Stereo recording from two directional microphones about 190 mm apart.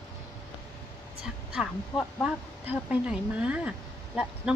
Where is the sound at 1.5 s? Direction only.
5° right (ahead or behind).